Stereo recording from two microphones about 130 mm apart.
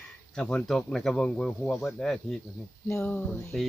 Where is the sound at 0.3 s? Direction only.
5° left (ahead or behind).